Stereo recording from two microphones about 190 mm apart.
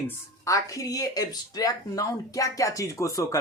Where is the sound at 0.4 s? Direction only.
15° left (ahead or behind).